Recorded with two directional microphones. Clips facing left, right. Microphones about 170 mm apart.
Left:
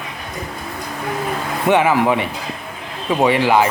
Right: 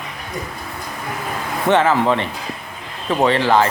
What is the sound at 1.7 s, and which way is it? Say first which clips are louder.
Speech: left 1 dB; 10° left (ahead or behind).